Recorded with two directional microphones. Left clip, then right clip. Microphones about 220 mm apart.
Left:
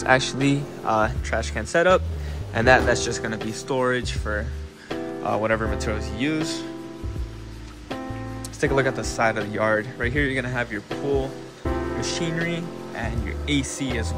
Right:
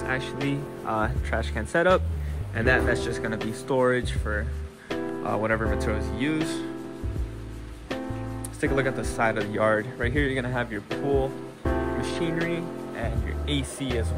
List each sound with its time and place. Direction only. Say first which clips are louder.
0.0 s speech: left 9 dB; 20° left (ahead or behind)
0.8 s speech: left 6 dB; 5° left (ahead or behind)
2.5 s speech: left 6 dB; 15° left (ahead or behind)
8.5 s speech: left 4 dB; 15° left (ahead or behind); by 14.0 s 5° right (ahead or behind)